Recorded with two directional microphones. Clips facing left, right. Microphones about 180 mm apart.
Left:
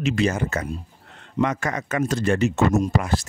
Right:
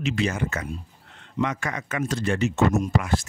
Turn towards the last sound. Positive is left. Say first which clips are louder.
# left 2 dB
turn(degrees=40)  # may be behind; listen again after turning